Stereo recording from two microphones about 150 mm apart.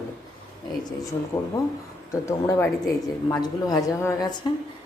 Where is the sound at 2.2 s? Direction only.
20° left (ahead or behind).